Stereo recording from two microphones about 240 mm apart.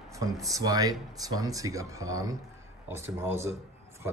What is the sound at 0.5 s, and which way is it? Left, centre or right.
A man's voice, centre.